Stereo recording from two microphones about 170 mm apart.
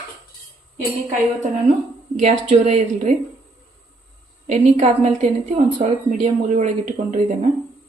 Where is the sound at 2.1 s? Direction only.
40° right (ahead or behind).